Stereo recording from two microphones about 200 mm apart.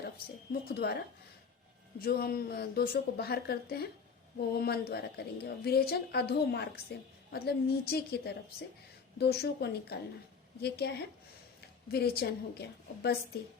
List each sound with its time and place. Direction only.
0.7 s a woman's voice: 55° left (ahead or behind)
2.0 s a woman's voice: 50° left (ahead or behind)